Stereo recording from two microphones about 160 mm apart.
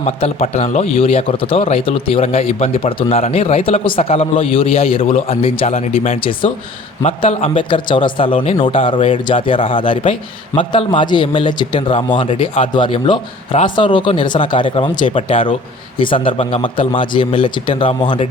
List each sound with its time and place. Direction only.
0.0 s a man's voice: 40° left (ahead or behind)